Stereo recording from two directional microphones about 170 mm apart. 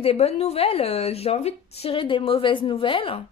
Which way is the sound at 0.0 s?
40° left (ahead or behind).